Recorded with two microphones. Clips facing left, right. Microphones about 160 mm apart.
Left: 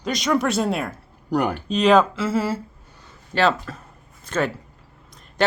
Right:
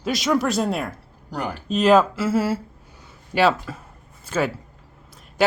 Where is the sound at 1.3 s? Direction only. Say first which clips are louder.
Left 7 dB; 60° left (ahead or behind).